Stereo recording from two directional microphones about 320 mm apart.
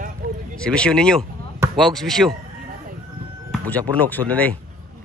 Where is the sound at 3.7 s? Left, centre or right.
Centre.